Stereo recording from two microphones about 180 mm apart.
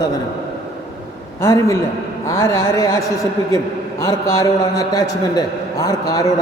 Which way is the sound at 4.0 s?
20° left (ahead or behind).